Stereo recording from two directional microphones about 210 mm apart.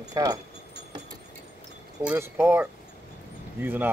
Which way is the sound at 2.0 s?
10° right (ahead or behind).